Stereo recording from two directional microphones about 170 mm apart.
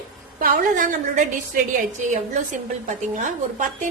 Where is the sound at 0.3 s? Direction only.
55° right (ahead or behind).